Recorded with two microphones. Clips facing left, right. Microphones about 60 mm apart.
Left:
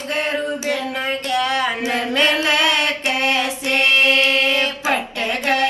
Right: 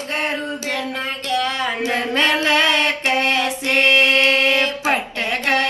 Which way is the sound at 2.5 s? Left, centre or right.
Right.